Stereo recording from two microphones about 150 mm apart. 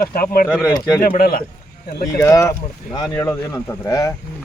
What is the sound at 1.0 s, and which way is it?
Speech, 85° left.